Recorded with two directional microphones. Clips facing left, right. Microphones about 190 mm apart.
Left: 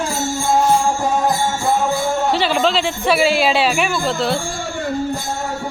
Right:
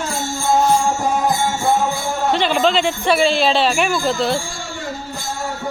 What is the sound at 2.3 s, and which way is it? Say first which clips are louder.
A man's voice: right 3 dB; 5° left (ahead or behind).